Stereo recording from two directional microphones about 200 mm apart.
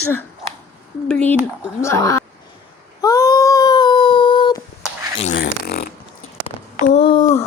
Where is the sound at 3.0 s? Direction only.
20° left (ahead or behind).